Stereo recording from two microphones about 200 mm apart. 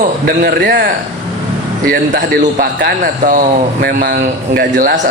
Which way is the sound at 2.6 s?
50° right (ahead or behind).